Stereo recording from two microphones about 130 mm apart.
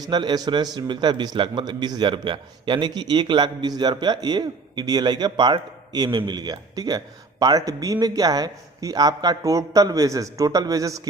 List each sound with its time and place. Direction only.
0.0 s a man's voice: 35° right (ahead or behind)